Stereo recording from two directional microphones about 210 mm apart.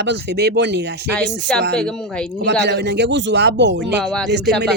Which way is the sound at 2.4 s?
50° right (ahead or behind).